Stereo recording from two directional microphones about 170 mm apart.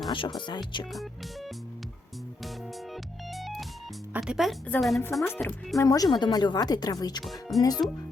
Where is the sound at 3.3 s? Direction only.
Centre (ahead or behind).